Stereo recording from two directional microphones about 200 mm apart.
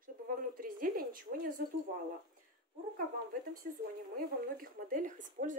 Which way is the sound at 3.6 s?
50° right (ahead or behind).